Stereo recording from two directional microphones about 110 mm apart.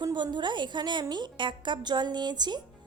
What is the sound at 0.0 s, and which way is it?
A woman's voice, 40° right (ahead or behind).